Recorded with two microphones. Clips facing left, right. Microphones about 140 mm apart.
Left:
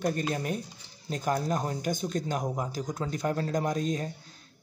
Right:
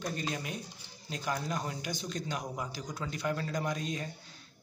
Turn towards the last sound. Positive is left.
turn(degrees=45)  # may be behind; listen again after turning